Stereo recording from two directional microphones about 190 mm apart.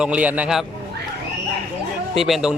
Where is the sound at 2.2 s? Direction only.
Centre (ahead or behind).